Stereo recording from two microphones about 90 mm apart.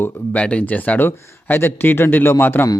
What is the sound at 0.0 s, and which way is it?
Speech, 15° left (ahead or behind).